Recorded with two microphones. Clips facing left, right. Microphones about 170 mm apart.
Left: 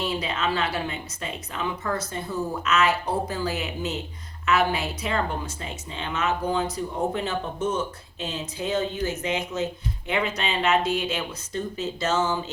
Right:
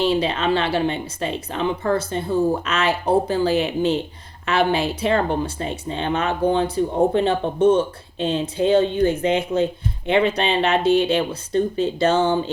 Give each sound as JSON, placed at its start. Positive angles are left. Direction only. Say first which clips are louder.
{"t": 0.0, "sound": "speech", "louder": "right 7 dB", "side_deg": -30}